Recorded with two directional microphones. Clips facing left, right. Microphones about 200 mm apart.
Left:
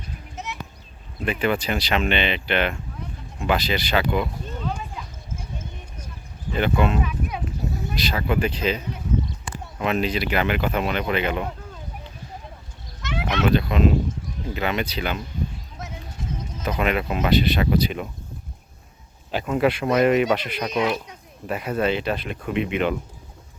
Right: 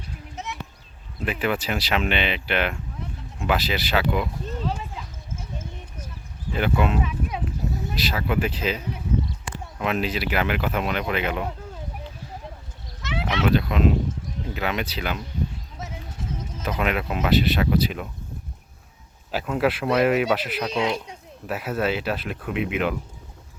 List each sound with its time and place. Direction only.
1.2 s speech: 5° right (ahead or behind)
4.6 s clip-clop: 30° right (ahead or behind)
6.5 s speech: 5° right (ahead or behind)
7.0 s horse: 25° right (ahead or behind)
7.9 s speech: 5° right (ahead or behind)
13.0 s a sound: 5° right (ahead or behind)
14.4 s speech: centre (ahead or behind)
16.7 s speech: centre (ahead or behind)
19.3 s speech: 5° right (ahead or behind)
20.7 s speech: 30° right (ahead or behind)
21.4 s speech: 5° right (ahead or behind)